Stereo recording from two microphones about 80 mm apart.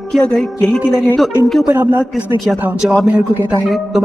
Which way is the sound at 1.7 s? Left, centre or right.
Right.